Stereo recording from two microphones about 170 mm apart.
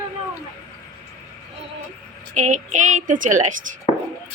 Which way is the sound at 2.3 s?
45° right (ahead or behind).